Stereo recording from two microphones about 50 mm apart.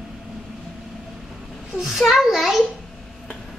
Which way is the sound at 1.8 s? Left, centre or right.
Centre.